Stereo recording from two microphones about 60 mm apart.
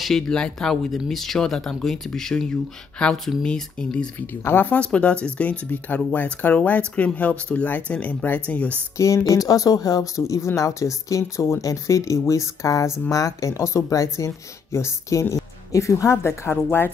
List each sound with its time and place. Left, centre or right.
0.0 s speech: centre
4.3 s speech: left
4.7 s speech: left
8.9 s speech: left
9.3 s speech: left